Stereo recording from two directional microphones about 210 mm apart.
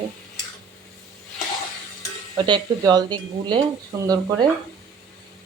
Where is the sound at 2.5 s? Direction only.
20° right (ahead or behind).